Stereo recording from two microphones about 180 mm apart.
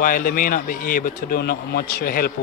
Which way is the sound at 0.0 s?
50° left (ahead or behind).